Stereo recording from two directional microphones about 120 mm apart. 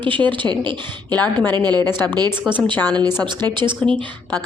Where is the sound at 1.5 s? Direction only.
35° right (ahead or behind).